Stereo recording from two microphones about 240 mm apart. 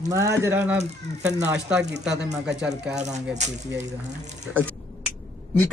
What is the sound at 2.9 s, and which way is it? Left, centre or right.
Speech, right.